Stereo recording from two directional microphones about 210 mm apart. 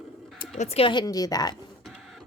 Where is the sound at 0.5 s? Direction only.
30° left (ahead or behind).